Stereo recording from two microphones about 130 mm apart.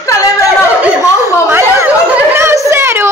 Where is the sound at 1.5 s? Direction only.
20° right (ahead or behind).